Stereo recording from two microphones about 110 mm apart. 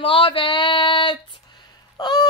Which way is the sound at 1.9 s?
40° left (ahead or behind).